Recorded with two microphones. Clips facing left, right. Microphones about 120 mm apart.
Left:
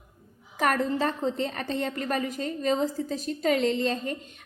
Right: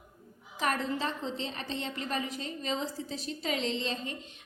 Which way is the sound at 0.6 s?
50° left (ahead or behind).